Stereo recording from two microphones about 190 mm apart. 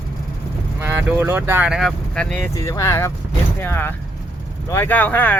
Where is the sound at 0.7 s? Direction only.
15° right (ahead or behind); by 2.4 s 5° left (ahead or behind).